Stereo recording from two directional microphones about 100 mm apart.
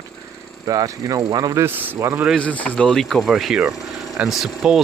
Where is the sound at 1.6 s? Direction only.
25° right (ahead or behind).